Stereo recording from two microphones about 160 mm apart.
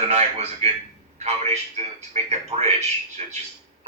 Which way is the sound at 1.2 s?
40° right (ahead or behind).